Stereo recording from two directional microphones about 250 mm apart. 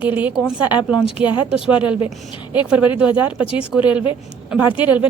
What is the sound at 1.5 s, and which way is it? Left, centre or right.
Speech, centre.